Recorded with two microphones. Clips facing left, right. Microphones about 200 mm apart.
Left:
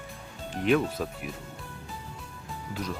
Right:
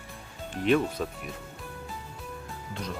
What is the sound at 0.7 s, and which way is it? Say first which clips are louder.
Speech: even; centre (ahead or behind).